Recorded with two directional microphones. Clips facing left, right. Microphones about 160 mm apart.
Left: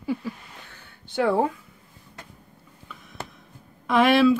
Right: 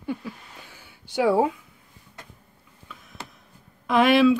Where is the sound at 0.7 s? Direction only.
10° right (ahead or behind).